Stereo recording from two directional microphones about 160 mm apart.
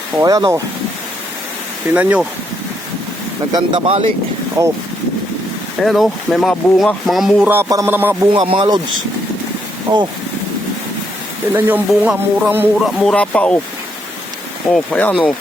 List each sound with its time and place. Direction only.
0.2 s speech: 20° right (ahead or behind)
1.9 s speech: 10° right (ahead or behind)
3.5 s speech: 30° right (ahead or behind)
5.8 s speech: centre (ahead or behind)
7.5 s speech: 15° right (ahead or behind)
8.3 s speech: 35° right (ahead or behind)
9.9 s speech: 25° right (ahead or behind)
11.5 s speech: 10° right (ahead or behind)
12.8 s speech: centre (ahead or behind)
14.7 s speech: 5° left (ahead or behind)